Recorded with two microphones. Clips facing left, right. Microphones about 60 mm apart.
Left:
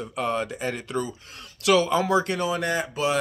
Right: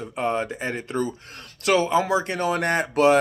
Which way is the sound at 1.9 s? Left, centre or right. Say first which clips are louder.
Right 1 dB; right.